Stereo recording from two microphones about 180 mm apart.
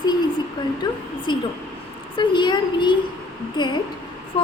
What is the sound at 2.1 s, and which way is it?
Speech, 25° left (ahead or behind).